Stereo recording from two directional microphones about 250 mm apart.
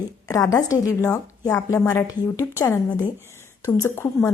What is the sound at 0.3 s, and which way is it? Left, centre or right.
A woman's voice, centre.